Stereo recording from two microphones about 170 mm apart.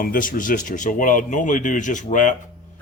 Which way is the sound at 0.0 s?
55° left (ahead or behind).